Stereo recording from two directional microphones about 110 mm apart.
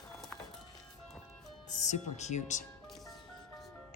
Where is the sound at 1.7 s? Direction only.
90° left.